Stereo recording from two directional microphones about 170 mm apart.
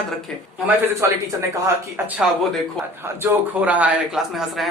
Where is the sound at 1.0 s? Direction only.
15° right (ahead or behind).